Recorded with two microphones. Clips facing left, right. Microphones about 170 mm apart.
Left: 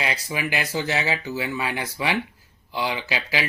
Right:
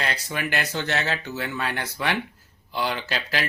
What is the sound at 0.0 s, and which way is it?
Speech, 5° left (ahead or behind).